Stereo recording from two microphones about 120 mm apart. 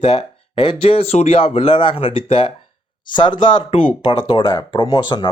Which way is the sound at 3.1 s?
40° left (ahead or behind).